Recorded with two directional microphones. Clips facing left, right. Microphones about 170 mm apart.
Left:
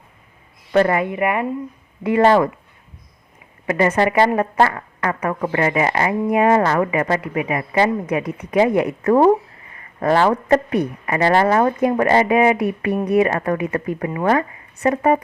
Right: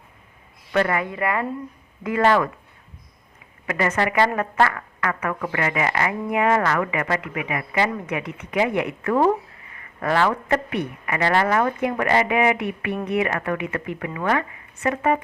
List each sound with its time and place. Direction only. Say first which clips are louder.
0.7 s speech: left 5 dB; 30° left (ahead or behind)
3.7 s speech: left 6 dB; 30° left (ahead or behind)